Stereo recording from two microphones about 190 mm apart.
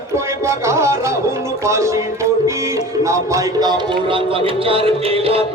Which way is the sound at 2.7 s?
15° right (ahead or behind).